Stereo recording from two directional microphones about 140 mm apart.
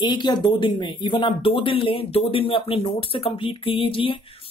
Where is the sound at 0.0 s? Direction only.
35° left (ahead or behind).